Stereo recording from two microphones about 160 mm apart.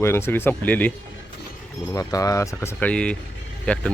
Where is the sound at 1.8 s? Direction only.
20° left (ahead or behind).